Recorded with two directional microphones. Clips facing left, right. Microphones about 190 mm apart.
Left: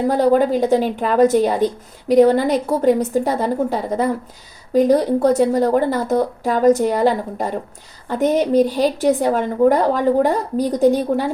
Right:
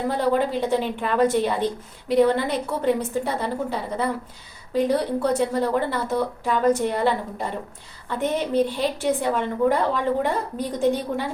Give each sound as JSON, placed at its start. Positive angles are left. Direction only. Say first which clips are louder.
{"t": 0.1, "sound": "a woman's voice", "louder": "left 7 dB", "side_deg": 40}